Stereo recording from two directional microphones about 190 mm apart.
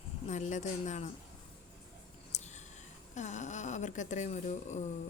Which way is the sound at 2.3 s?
35° left (ahead or behind).